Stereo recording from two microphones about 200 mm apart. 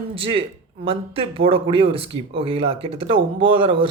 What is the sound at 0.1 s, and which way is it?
Speech, 25° right (ahead or behind).